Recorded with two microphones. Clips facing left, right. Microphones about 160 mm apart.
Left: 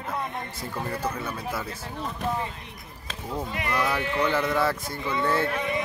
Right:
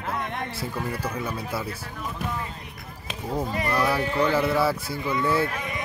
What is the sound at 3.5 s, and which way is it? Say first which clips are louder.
Speech: right 2 dB; 35° right (ahead or behind).